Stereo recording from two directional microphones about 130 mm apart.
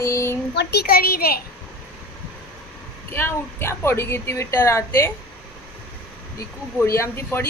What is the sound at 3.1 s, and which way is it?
A woman's voice, 20° left (ahead or behind).